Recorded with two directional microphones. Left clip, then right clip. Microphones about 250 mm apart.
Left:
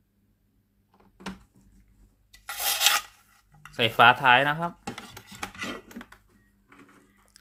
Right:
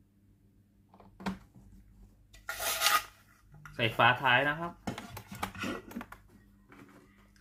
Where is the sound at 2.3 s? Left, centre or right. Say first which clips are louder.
Left 6 dB; left.